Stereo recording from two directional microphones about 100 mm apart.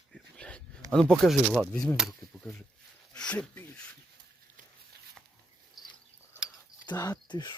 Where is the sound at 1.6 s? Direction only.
10° left (ahead or behind).